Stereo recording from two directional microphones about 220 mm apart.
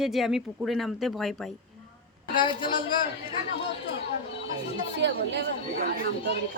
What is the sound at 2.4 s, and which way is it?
Speech, 20° left (ahead or behind).